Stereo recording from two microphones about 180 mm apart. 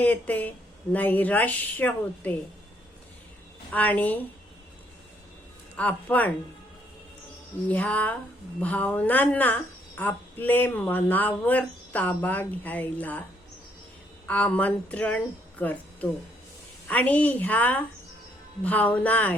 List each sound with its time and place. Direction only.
0.0 s speech: 10° left (ahead or behind)
3.7 s speech: 10° left (ahead or behind)
5.7 s speech: 10° left (ahead or behind)
7.7 s speech: 10° left (ahead or behind)
14.3 s speech: 10° left (ahead or behind)